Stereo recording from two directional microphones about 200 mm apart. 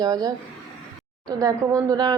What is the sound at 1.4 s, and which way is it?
Speech, 15° right (ahead or behind).